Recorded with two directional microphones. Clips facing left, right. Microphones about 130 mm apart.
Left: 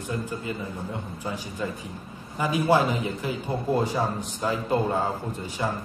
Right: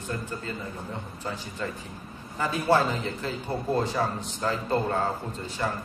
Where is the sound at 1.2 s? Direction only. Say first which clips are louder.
Left 2 dB; 10° left (ahead or behind).